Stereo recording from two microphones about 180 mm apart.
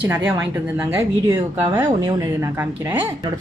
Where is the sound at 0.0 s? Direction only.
10° right (ahead or behind).